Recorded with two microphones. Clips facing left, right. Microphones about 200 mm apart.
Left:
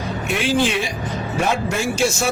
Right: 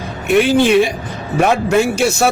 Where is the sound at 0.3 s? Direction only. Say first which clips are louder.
Right 9 dB; 60° right (ahead or behind).